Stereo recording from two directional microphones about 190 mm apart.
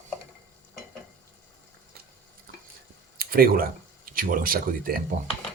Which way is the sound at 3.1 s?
50° right (ahead or behind).